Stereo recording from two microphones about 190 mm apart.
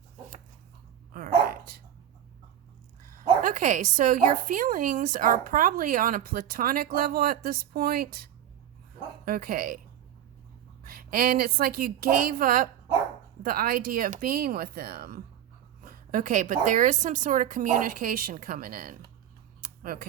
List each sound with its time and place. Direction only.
1.1 s dog: 50° right (ahead or behind)
3.0 s a woman's voice: 45° right (ahead or behind)
10.8 s a woman's voice: 50° right (ahead or behind)
19.6 s a sound: 50° right (ahead or behind)